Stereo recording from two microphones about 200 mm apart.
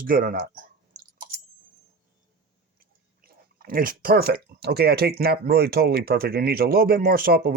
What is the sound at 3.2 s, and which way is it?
Speech, 45° right (ahead or behind).